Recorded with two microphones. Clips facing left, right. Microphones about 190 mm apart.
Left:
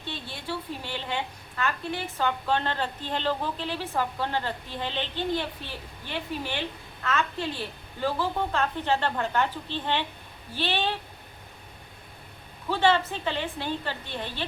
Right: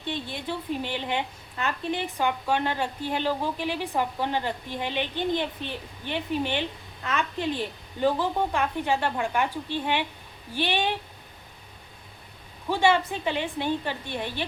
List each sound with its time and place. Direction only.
0.0 s a woman's voice: 15° right (ahead or behind)
12.6 s a woman's voice: 15° right (ahead or behind)